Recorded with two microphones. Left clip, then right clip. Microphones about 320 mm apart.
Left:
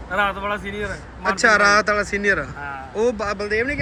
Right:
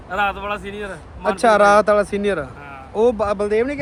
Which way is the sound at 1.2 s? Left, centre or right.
Centre.